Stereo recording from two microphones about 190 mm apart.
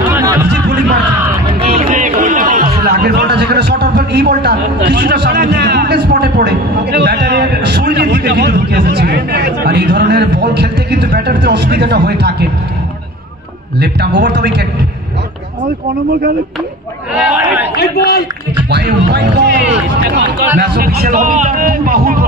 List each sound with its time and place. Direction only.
0.1 s chatter: 15° right (ahead or behind)
1.6 s music: 35° right (ahead or behind)
1.9 s speech: 45° right (ahead or behind)
13.7 s speech: 65° right (ahead or behind)
17.2 s a man's voice: 10° right (ahead or behind)
17.7 s a man's voice: 55° left (ahead or behind)
18.7 s a man's voice: 60° right (ahead or behind)